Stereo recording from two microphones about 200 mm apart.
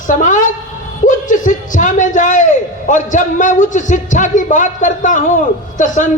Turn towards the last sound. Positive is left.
turn(degrees=40)  # may be behind; listen again after turning